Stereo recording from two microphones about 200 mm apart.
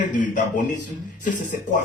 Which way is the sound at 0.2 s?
40° left (ahead or behind).